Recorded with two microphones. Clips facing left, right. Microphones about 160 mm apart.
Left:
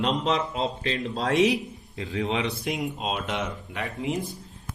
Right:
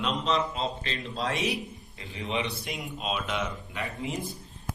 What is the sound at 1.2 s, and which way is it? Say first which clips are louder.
A man's voice: left 8 dB; 90° left.